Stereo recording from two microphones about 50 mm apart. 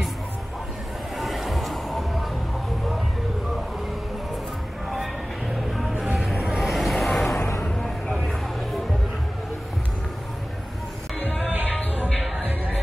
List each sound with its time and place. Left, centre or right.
1.1 s music: centre
4.8 s music: centre
5.7 s vehicle: centre
6.7 s vehicle: centre
7.3 s music: left